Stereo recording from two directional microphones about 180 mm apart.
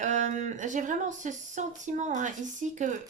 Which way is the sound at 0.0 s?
45° right (ahead or behind).